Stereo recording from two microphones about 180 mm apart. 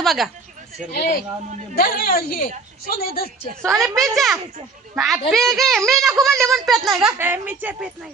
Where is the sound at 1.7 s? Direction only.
55° left (ahead or behind).